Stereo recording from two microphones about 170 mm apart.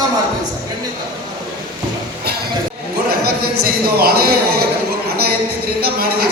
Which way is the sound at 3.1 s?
65° right (ahead or behind).